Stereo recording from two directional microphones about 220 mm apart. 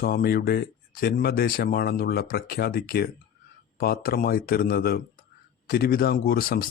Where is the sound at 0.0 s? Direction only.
45° left (ahead or behind).